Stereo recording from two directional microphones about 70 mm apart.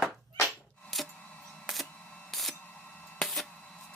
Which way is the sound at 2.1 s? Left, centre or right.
Centre.